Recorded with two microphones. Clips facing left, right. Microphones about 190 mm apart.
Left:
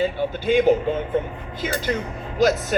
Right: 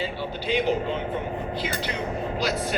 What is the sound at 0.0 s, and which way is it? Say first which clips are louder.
Speech: left 7 dB; 50° left (ahead or behind).